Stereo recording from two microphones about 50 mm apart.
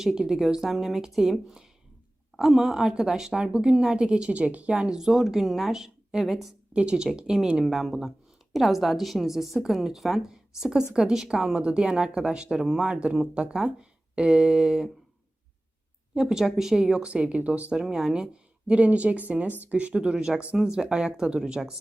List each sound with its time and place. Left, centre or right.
0.0 s a woman's voice: centre; by 4.7 s right
4.7 s a woman's voice: centre
6.7 s a woman's voice: centre
7.5 s a woman's voice: centre
16.1 s a woman's voice: centre; by 17.7 s right
17.8 s a woman's voice: centre
18.7 s a woman's voice: right
20.4 s a woman's voice: right
20.9 s a woman's voice: centre